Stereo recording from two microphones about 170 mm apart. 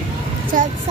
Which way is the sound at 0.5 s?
50° right (ahead or behind).